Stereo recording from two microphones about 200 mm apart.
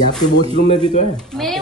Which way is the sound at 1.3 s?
Centre (ahead or behind).